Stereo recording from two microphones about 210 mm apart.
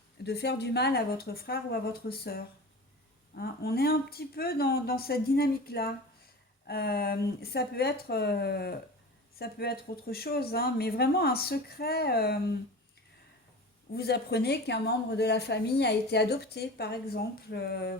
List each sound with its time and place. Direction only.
0.3 s a woman's voice: 50° left (ahead or behind)
13.9 s a woman's voice: 50° left (ahead or behind)